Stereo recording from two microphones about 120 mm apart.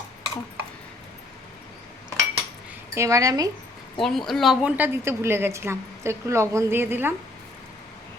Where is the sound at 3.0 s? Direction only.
25° right (ahead or behind).